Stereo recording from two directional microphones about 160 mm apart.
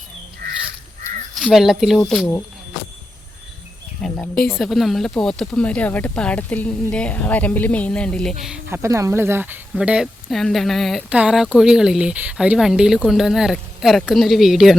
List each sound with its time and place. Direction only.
0.4 s crow: 75° right (ahead or behind)
1.4 s speech: centre (ahead or behind)
4.0 s speech: 5° left (ahead or behind)
8.8 s speech: 20° right (ahead or behind); by 14.8 s centre (ahead or behind)